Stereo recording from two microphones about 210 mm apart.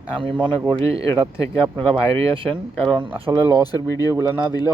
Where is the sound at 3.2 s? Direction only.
25° right (ahead or behind).